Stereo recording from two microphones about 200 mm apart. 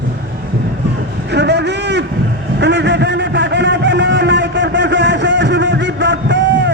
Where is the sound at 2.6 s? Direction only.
60° right (ahead or behind).